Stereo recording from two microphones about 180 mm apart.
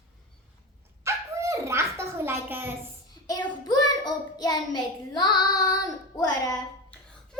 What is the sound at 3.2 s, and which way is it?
Child singing, 20° left (ahead or behind).